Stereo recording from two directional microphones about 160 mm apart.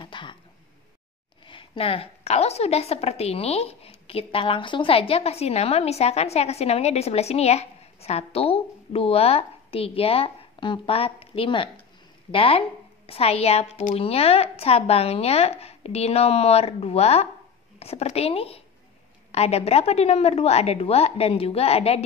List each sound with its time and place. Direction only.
0.0 s throat clearing: 30° left (ahead or behind)
1.4 s a woman's voice: 30° left (ahead or behind)